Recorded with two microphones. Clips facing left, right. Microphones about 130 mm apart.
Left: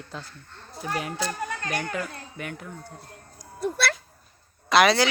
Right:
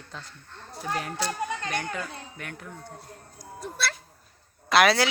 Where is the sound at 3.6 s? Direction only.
65° left (ahead or behind).